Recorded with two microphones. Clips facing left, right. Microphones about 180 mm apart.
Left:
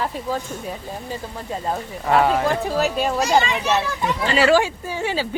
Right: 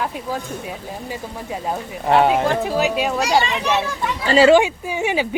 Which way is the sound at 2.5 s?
Centre (ahead or behind).